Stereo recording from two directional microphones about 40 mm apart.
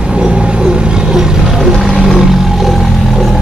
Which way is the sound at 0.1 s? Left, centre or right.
Right.